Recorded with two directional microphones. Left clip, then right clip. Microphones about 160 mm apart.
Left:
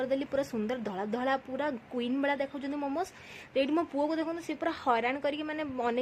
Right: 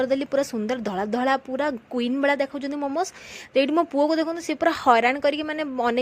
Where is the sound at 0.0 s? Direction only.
40° right (ahead or behind).